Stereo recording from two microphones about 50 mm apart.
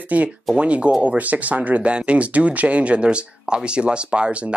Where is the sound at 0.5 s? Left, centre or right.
Right.